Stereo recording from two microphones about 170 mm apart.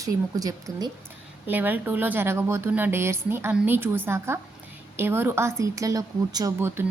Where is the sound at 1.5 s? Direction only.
10° right (ahead or behind).